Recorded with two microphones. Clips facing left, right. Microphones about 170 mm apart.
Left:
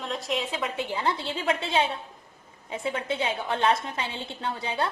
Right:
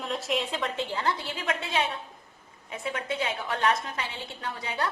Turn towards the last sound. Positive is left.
turn(degrees=30)  # may be behind; listen again after turning